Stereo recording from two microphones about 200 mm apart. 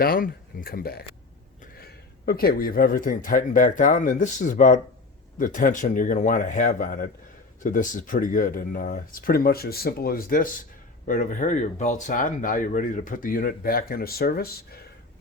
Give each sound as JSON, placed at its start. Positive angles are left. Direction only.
{"t": 0.0, "sound": "speech", "side_deg": 45}